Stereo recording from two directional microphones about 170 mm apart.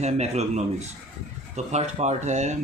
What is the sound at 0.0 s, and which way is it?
Speech, 40° right (ahead or behind).